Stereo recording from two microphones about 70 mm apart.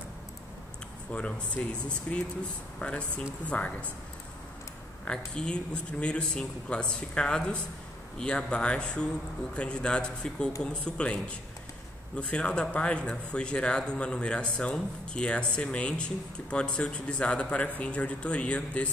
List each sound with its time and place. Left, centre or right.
1.1 s speech: centre
5.0 s speech: centre